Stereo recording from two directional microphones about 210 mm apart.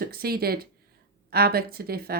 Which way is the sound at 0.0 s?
45° right (ahead or behind).